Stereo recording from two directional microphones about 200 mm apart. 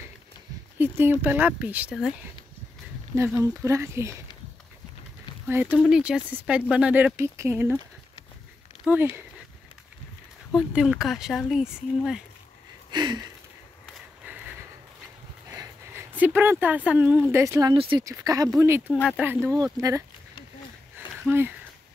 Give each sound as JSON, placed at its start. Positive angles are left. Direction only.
{"t": 0.7, "sound": "speech", "side_deg": -10}
{"t": 3.2, "sound": "speech", "side_deg": -15}
{"t": 5.5, "sound": "speech", "side_deg": -10}
{"t": 8.8, "sound": "speech", "side_deg": -10}
{"t": 10.5, "sound": "speech", "side_deg": -5}
{"t": 12.9, "sound": "speech", "side_deg": -20}
{"t": 13.8, "sound": "a sound", "side_deg": -5}
{"t": 15.5, "sound": "speech", "side_deg": -10}
{"t": 19.4, "sound": "speech", "side_deg": -15}
{"t": 21.3, "sound": "speech", "side_deg": -10}